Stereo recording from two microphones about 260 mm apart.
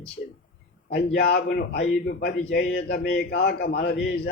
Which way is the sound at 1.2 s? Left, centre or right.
Left.